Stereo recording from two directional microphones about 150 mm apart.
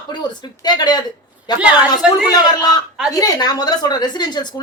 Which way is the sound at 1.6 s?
5° right (ahead or behind).